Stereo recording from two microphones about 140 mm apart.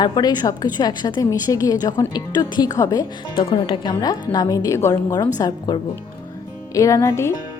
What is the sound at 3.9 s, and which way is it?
A woman's voice, 25° left (ahead or behind).